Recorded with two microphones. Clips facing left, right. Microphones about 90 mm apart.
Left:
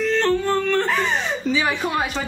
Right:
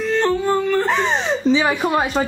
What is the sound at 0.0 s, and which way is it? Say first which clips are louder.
Yodeling: right 1 dB; 15° right (ahead or behind).